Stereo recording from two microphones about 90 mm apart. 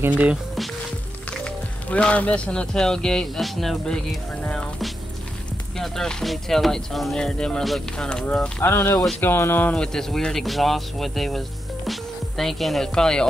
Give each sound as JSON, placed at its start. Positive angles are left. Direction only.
{"t": 0.0, "sound": "speech", "side_deg": -15}
{"t": 1.3, "sound": "speech", "side_deg": 10}
{"t": 8.6, "sound": "speech", "side_deg": 25}
{"t": 9.9, "sound": "speech", "side_deg": 5}